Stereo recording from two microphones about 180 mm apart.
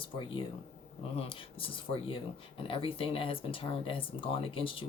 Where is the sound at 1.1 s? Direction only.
30° left (ahead or behind).